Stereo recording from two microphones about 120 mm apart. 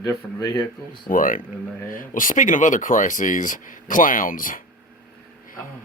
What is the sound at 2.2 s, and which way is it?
Speech, 90° left.